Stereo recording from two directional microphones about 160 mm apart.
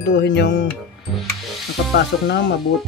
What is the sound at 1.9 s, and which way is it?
Speech, 90° left.